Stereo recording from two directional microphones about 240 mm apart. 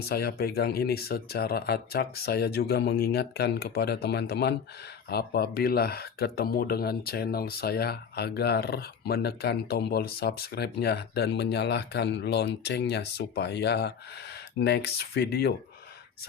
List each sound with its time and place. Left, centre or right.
0.0 s speech: left